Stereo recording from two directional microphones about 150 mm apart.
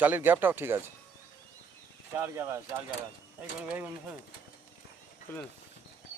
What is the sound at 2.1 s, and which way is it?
Speech, 15° right (ahead or behind).